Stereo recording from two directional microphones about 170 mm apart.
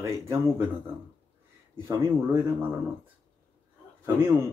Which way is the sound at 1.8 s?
15° right (ahead or behind).